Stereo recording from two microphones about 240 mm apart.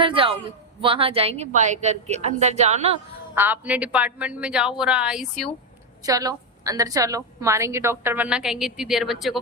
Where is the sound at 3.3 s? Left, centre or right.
Centre.